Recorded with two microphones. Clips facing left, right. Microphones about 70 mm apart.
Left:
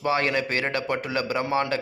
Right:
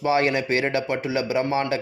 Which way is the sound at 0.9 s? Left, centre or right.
Centre.